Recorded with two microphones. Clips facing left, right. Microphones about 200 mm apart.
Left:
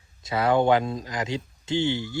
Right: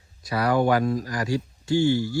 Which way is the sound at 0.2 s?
25° left (ahead or behind).